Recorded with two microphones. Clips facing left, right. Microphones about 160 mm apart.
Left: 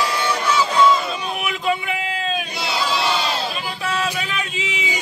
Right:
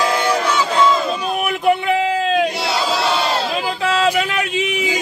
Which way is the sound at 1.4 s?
55° right (ahead or behind).